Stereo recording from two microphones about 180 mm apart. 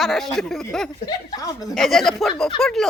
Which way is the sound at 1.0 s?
20° left (ahead or behind).